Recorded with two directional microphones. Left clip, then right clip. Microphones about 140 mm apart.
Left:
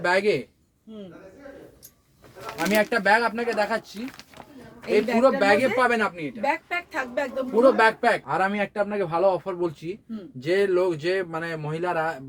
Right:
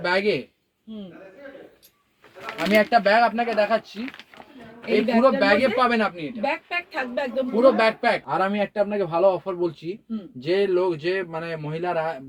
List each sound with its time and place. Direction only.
0.0 s speech: 35° left (ahead or behind)
2.6 s speech: 30° left (ahead or behind)
5.2 s speech: 25° left (ahead or behind)
6.4 s speech: centre (ahead or behind)
7.5 s speech: 25° left (ahead or behind)
8.3 s speech: 5° left (ahead or behind); by 12.2 s 20° left (ahead or behind)